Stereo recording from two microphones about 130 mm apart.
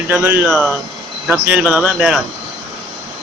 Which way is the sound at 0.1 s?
15° right (ahead or behind).